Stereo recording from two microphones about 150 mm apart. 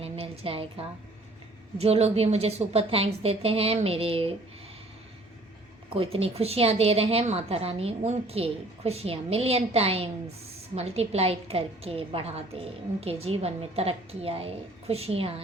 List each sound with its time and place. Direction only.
0.0 s a sound: 40° right (ahead or behind)
1.8 s a woman's voice: 45° right (ahead or behind)
5.9 s a woman's voice: 40° right (ahead or behind)